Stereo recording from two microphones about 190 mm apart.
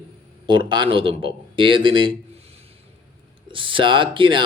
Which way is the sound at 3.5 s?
25° right (ahead or behind).